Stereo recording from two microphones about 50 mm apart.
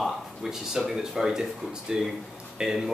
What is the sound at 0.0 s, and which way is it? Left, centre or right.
Speech, centre.